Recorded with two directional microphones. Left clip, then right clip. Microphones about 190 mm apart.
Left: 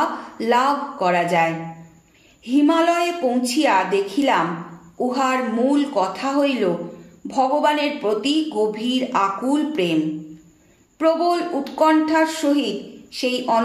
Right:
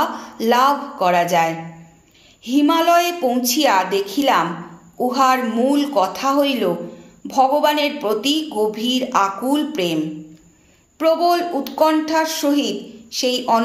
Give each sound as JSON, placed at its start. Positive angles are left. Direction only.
{"t": 0.4, "sound": "speech", "side_deg": -30}
{"t": 11.0, "sound": "speech", "side_deg": -30}